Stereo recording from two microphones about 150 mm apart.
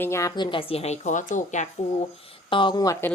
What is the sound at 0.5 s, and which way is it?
A woman's voice, 40° left (ahead or behind).